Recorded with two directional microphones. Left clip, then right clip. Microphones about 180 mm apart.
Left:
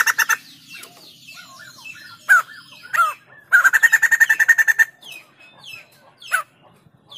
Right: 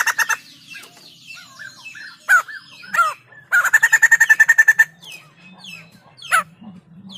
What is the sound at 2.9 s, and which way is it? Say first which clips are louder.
Bird: right 1 dB; 15° right (ahead or behind).